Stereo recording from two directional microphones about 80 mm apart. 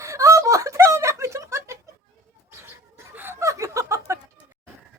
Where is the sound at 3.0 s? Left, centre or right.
Right.